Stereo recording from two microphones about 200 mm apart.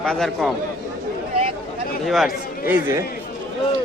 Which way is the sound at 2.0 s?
Centre (ahead or behind).